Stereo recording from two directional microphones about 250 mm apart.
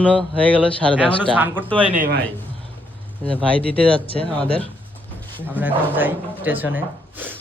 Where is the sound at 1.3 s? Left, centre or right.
Centre.